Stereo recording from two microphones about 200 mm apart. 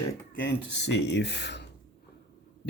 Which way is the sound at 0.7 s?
60° left (ahead or behind).